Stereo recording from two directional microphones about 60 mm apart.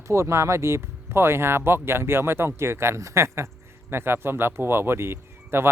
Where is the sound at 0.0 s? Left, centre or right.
Right.